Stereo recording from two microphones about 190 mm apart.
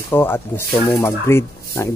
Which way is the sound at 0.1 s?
10° left (ahead or behind).